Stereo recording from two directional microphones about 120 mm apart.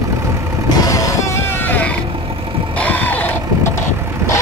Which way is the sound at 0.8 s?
30° left (ahead or behind).